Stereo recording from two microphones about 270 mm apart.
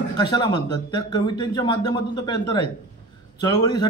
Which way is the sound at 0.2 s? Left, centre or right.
Centre.